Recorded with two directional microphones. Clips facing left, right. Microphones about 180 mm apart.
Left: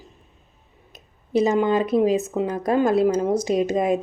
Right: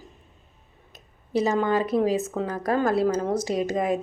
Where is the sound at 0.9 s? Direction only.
20° left (ahead or behind).